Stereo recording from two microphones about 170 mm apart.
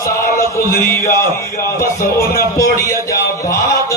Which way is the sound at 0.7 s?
15° left (ahead or behind).